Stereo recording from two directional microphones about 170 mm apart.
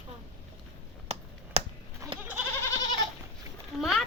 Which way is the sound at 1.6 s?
35° right (ahead or behind).